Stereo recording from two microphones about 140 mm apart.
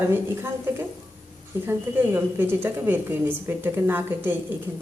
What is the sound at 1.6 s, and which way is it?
A woman's voice, 15° right (ahead or behind).